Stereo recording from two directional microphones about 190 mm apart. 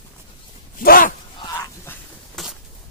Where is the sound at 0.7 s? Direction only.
50° left (ahead or behind).